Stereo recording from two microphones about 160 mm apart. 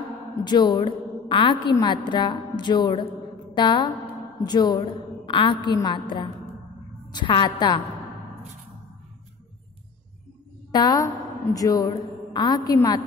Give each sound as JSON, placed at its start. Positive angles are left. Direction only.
{"t": 0.4, "sound": "a woman's voice", "side_deg": 25}
{"t": 10.7, "sound": "a woman's voice", "side_deg": 25}